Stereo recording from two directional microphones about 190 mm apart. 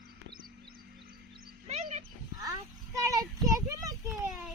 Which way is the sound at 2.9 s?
20° right (ahead or behind).